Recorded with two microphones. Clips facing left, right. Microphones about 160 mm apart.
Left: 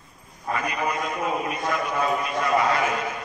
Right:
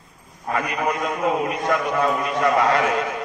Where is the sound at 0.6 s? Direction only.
65° right (ahead or behind).